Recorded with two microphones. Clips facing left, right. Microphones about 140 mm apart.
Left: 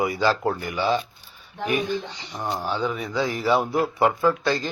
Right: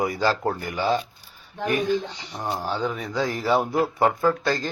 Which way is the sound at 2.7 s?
40° right (ahead or behind).